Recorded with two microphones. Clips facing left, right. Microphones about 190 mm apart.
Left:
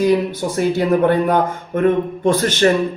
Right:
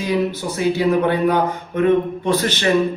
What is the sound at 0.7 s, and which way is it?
Speech, 50° left (ahead or behind).